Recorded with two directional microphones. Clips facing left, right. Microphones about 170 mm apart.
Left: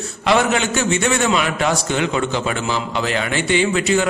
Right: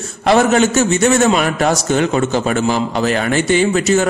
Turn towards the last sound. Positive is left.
turn(degrees=-45)  # may be behind; listen again after turning